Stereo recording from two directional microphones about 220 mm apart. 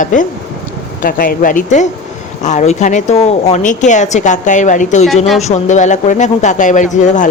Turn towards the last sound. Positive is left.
turn(degrees=35)  # may be behind; listen again after turning